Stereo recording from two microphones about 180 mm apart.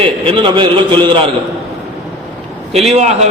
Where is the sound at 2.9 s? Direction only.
40° right (ahead or behind).